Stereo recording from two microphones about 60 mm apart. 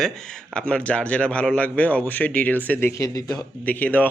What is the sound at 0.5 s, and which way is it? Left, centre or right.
Speech, centre.